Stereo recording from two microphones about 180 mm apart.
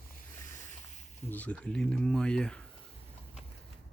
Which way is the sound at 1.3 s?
10° left (ahead or behind).